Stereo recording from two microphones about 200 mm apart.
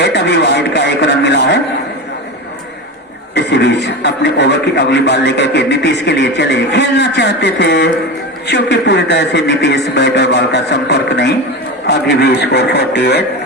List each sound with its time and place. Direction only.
0.0 s television: 60° left (ahead or behind)
3.3 s a man's voice: 60° left (ahead or behind)